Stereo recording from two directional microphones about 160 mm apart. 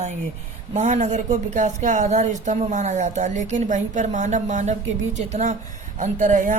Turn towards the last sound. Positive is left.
turn(degrees=-50)  # may be behind; listen again after turning